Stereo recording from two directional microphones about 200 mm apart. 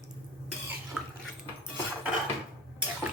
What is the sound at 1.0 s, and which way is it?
Dishes, 10° right (ahead or behind).